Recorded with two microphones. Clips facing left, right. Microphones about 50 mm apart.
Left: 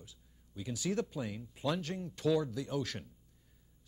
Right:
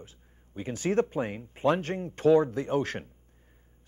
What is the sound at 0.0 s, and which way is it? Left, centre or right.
Speech, right.